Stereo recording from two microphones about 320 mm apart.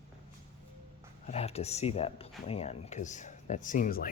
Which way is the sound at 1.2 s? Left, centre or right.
Centre.